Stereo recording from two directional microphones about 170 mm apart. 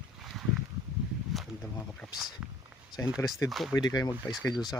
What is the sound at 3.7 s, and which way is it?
Speech, 25° left (ahead or behind).